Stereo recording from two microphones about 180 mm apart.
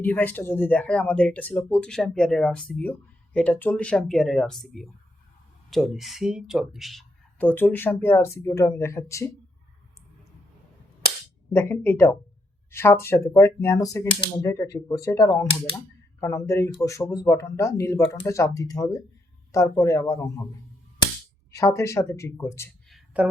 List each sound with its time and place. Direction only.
0.0 s speech: 10° left (ahead or behind)
11.5 s speech: 10° left (ahead or behind)
21.5 s speech: 15° left (ahead or behind)
22.9 s a sound: 5° right (ahead or behind)